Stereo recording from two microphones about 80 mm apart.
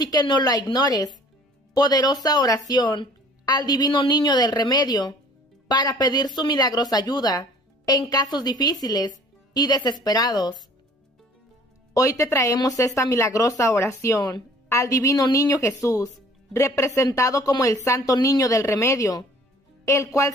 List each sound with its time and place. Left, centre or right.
0.0 s speech: left
2.7 s a woman's voice: left
4.2 s a woman's voice: left
11.9 s speech: left